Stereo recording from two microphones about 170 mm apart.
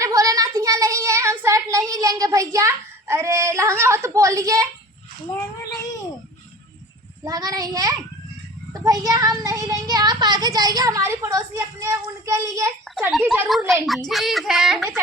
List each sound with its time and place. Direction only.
0.0 s child singing: 20° right (ahead or behind)
7.3 s a child's voice: 20° right (ahead or behind)
13.1 s speech: 5° right (ahead or behind)